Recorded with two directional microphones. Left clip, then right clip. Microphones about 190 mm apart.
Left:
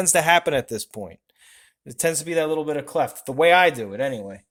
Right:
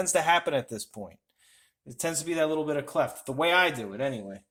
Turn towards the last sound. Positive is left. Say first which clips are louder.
# left 7 dB
turn(degrees=65)  # may be behind; listen again after turning